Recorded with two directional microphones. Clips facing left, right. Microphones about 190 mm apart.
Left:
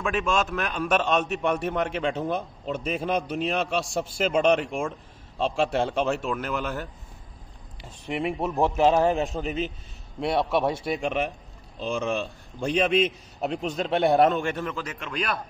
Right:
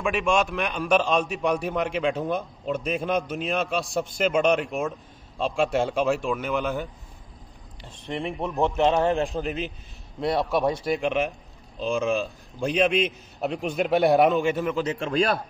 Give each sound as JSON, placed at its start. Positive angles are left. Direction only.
{"t": 0.3, "sound": "a man's voice", "side_deg": 0}
{"t": 14.9, "sound": "a man's voice", "side_deg": -30}